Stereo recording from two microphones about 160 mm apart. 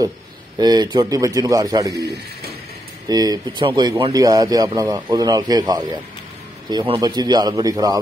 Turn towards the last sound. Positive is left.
turn(degrees=-25)  # may be behind; listen again after turning